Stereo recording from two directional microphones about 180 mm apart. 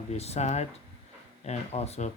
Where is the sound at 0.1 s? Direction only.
35° left (ahead or behind).